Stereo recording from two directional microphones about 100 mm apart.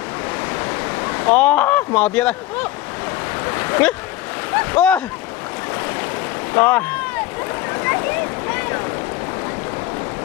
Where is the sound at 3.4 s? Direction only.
25° left (ahead or behind).